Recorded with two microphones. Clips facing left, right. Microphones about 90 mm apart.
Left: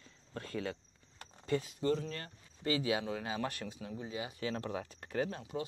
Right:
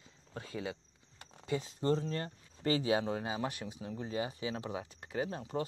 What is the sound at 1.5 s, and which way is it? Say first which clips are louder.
Speech: right 1 dB; 30° right (ahead or behind).